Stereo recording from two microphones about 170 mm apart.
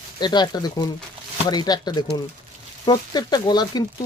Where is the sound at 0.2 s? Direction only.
25° left (ahead or behind).